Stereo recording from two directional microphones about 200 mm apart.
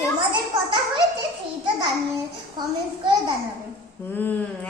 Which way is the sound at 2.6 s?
20° right (ahead or behind).